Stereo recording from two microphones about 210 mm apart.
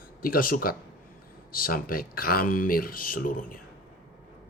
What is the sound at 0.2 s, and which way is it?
Speech, 45° left (ahead or behind).